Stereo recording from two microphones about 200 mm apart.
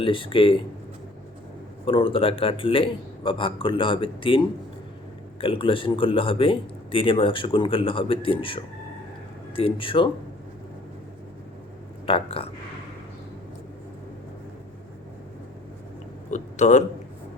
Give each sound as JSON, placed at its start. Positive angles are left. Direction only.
{"t": 0.0, "sound": "a man's voice", "side_deg": 25}
{"t": 1.8, "sound": "a man's voice", "side_deg": 25}
{"t": 12.0, "sound": "a man's voice", "side_deg": 25}
{"t": 16.3, "sound": "speech", "side_deg": 35}